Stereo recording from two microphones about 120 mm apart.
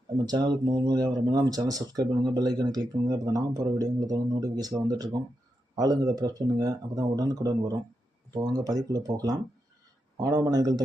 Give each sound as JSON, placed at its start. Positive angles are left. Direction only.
{"t": 0.3, "sound": "speech", "side_deg": -35}